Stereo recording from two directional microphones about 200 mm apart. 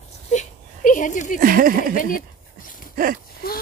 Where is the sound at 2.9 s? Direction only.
45° right (ahead or behind).